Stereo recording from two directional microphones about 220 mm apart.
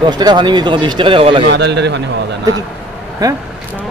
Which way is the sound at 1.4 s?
50° right (ahead or behind).